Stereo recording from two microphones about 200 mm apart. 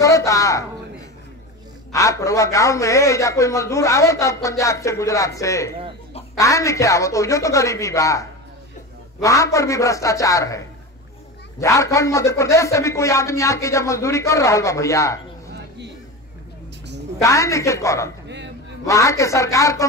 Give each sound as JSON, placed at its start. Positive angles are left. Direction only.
{"t": 0.0, "sound": "a man's voice", "side_deg": 15}
{"t": 1.9, "sound": "a man's voice", "side_deg": 15}
{"t": 11.6, "sound": "a man's voice", "side_deg": 15}
{"t": 17.2, "sound": "a man's voice", "side_deg": 15}